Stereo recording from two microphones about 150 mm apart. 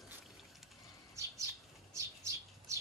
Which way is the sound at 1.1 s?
20° right (ahead or behind).